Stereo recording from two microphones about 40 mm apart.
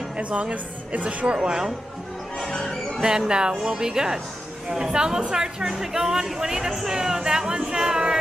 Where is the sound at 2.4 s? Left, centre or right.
Centre.